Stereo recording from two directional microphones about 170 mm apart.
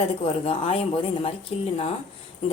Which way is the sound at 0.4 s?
35° left (ahead or behind).